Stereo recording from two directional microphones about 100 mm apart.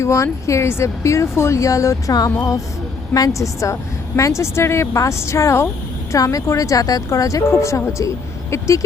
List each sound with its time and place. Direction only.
0.0 s speech: 30° left (ahead or behind)